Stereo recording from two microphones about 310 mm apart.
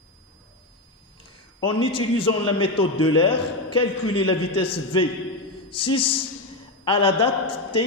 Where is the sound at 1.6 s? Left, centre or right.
Centre.